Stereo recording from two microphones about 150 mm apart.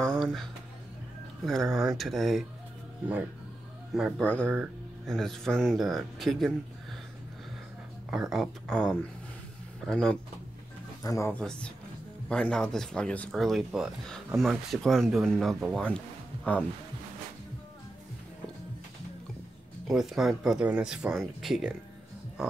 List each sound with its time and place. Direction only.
0.0 s a sound: centre (ahead or behind)
1.4 s speech: centre (ahead or behind)
4.2 s speech: 10° left (ahead or behind)
8.1 s speech: 5° right (ahead or behind)
11.0 s speech: 20° left (ahead or behind)
11.3 s speech: 5° left (ahead or behind)
19.9 s speech: centre (ahead or behind)